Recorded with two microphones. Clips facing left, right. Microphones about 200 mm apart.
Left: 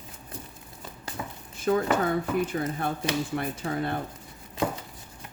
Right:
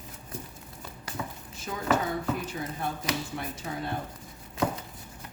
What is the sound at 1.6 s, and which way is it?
A woman's voice, 55° left (ahead or behind).